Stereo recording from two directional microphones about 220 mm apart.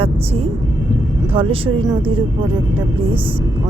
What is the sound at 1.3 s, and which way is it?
Speech, 25° right (ahead or behind).